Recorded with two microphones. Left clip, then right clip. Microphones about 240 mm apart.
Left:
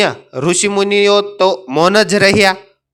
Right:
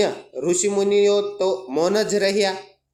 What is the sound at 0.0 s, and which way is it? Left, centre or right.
A man's voice, left.